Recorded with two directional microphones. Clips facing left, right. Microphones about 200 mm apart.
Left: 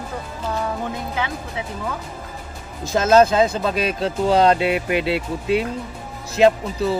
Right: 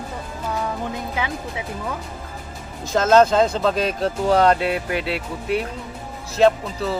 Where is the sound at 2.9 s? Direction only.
10° left (ahead or behind).